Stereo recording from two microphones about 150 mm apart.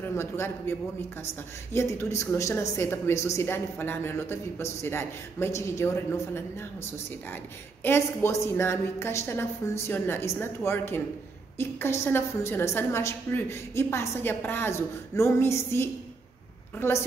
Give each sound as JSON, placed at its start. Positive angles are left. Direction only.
{"t": 0.0, "sound": "speech", "side_deg": 15}
{"t": 7.8, "sound": "speech", "side_deg": 15}